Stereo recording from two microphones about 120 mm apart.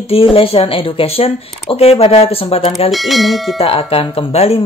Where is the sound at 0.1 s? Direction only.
50° left (ahead or behind).